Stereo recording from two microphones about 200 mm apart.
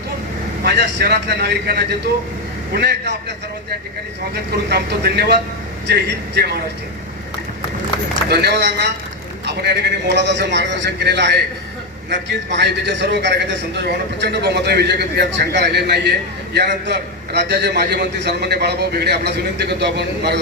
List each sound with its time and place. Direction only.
0.6 s a man's voice: 55° right (ahead or behind)
4.7 s a man's voice: 55° right (ahead or behind)
8.3 s a man's voice: 55° right (ahead or behind)